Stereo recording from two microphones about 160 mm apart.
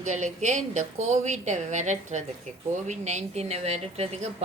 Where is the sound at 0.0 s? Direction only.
50° right (ahead or behind).